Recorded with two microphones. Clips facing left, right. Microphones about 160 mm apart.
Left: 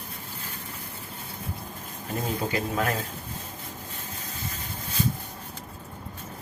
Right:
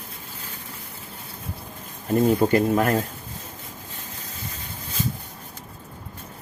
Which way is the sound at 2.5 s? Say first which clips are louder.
Right 8 dB; 55° right (ahead or behind).